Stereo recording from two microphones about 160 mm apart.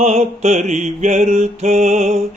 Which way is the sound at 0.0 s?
45° right (ahead or behind).